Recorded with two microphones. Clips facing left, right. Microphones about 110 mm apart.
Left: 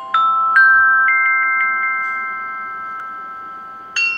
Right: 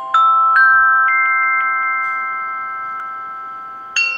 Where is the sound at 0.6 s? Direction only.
30° right (ahead or behind).